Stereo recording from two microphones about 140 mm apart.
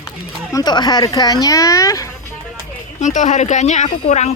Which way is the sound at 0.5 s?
30° left (ahead or behind).